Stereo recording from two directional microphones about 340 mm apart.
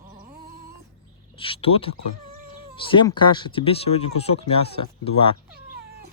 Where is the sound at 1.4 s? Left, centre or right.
Centre.